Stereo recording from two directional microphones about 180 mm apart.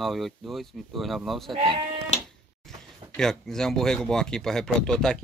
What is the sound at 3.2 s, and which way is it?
Speech, 5° left (ahead or behind).